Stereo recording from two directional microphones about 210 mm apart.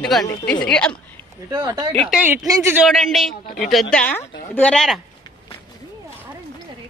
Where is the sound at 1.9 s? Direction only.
5° right (ahead or behind).